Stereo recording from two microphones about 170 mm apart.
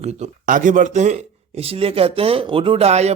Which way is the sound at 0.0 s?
40° right (ahead or behind).